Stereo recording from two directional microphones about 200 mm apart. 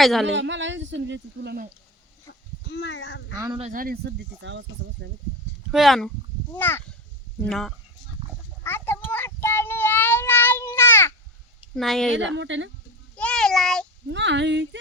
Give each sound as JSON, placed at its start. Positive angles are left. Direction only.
{"t": 0.0, "sound": "speech", "side_deg": 0}
{"t": 0.3, "sound": "speech", "side_deg": -65}
{"t": 2.6, "sound": "speech", "side_deg": 65}
{"t": 3.3, "sound": "speech", "side_deg": -15}
{"t": 3.6, "sound": "speech", "side_deg": -40}
{"t": 5.7, "sound": "speech", "side_deg": 0}
{"t": 6.6, "sound": "speech", "side_deg": 10}
{"t": 8.6, "sound": "child singing", "side_deg": 10}
{"t": 11.8, "sound": "speech", "side_deg": 0}
{"t": 12.4, "sound": "speech", "side_deg": -65}
{"t": 13.1, "sound": "a child's voice", "side_deg": 5}
{"t": 14.1, "sound": "speech", "side_deg": -65}